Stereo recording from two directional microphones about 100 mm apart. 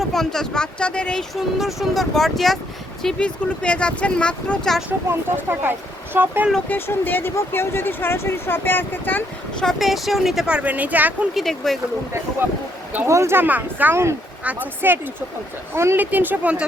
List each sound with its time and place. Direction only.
0.0 s speech: 5° left (ahead or behind)
1.4 s speech: centre (ahead or behind)
4.9 s speech: 20° right (ahead or behind)
6.7 s speech: 20° left (ahead or behind)
9.6 s speech: centre (ahead or behind); by 11.3 s 15° right (ahead or behind)
11.3 s speech: centre (ahead or behind)
13.1 s speech: 25° right (ahead or behind)